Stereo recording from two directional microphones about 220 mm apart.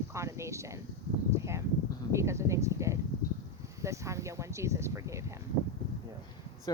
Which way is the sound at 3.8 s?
15° right (ahead or behind).